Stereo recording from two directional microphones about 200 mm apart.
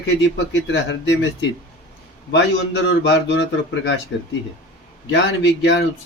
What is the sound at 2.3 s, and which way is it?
A man's voice, 65° left (ahead or behind).